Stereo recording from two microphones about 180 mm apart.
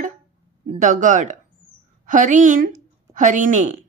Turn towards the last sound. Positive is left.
turn(degrees=-45)  # may be behind; listen again after turning